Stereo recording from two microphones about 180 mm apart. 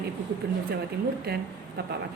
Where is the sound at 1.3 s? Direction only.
60° right (ahead or behind).